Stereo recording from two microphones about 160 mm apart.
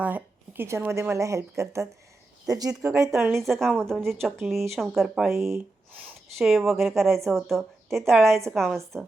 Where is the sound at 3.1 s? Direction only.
5° right (ahead or behind).